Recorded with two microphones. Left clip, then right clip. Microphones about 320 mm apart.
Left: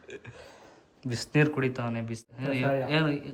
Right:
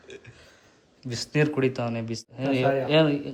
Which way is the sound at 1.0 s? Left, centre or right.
Centre.